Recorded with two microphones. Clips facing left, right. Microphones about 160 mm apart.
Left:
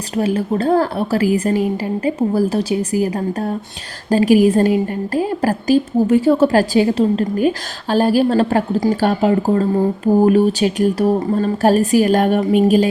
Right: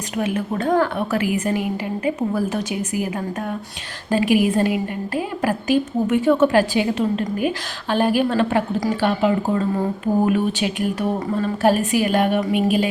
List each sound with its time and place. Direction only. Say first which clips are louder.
0.2 s a woman's voice: left 5 dB; 35° left (ahead or behind)